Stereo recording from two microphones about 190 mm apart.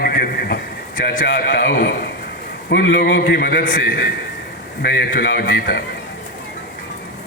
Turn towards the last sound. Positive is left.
turn(degrees=55)  # may be behind; listen again after turning